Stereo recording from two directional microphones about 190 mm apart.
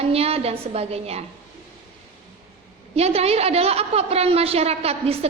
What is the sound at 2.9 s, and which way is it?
Speech, 30° right (ahead or behind).